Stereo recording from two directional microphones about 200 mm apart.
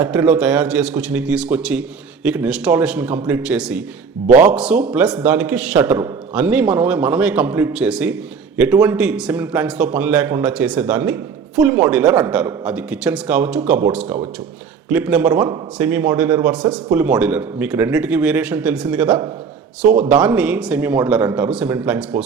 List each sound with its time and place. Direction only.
0.0 s a man's voice: 5° right (ahead or behind)